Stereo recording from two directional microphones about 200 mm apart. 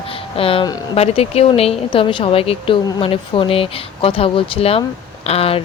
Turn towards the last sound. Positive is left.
turn(degrees=30)  # may be behind; listen again after turning